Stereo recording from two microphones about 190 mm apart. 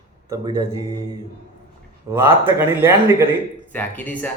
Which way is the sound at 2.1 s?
15° right (ahead or behind).